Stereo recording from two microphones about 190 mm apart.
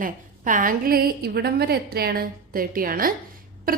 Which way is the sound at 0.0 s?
45° right (ahead or behind).